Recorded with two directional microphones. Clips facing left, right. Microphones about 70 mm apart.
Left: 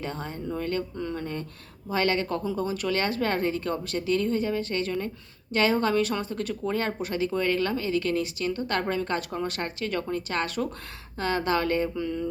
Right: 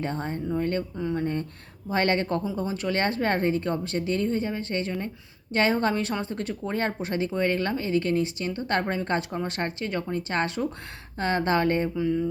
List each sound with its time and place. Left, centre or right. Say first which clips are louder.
0.0 s speech: right 4 dB; right
2.4 s speech: left 1 dB; right
11.9 s music: right 4 dB; centre